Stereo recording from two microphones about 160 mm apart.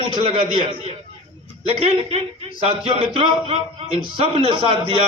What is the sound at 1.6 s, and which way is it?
A man's voice, 35° right (ahead or behind).